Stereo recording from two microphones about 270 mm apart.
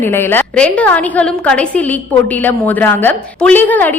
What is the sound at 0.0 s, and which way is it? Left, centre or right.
A woman's voice, centre.